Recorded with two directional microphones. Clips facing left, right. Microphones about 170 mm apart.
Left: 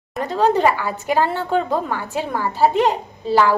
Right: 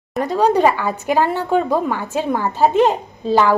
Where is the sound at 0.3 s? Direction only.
15° right (ahead or behind).